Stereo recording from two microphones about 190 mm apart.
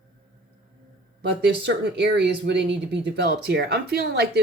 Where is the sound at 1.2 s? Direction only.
60° right (ahead or behind).